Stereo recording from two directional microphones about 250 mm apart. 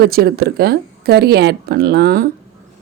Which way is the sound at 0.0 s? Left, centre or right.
Right.